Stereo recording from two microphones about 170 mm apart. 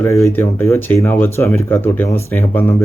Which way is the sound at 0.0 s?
15° left (ahead or behind).